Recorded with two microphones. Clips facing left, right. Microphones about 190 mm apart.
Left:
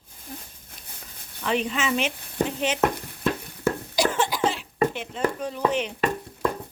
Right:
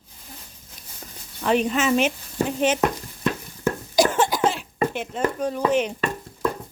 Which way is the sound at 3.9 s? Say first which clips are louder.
Right 8 dB; 45° right (ahead or behind).